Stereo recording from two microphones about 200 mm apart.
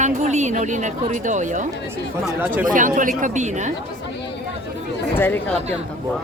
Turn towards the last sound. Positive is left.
turn(degrees=10)  # may be behind; listen again after turning